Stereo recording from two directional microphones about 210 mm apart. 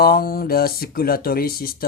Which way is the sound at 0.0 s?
45° left (ahead or behind).